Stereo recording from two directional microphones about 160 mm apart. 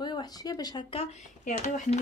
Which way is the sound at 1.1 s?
50° left (ahead or behind).